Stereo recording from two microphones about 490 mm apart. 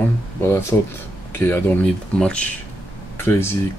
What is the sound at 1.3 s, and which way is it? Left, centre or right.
Speech, centre.